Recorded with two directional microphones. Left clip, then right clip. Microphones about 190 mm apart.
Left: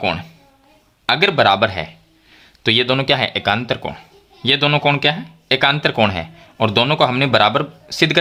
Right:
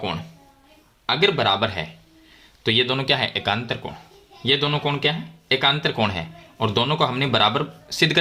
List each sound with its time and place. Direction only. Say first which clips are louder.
0.0 s speech: left 8 dB; 40° left (ahead or behind)